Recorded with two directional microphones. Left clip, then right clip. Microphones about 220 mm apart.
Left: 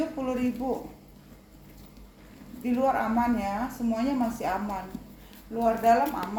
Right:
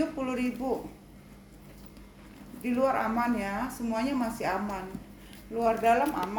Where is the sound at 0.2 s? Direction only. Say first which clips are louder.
Left 2 dB; 25° right (ahead or behind).